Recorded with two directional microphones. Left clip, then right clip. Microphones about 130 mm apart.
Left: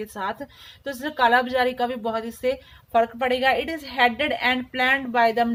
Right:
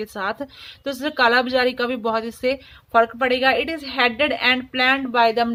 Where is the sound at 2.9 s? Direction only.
30° right (ahead or behind).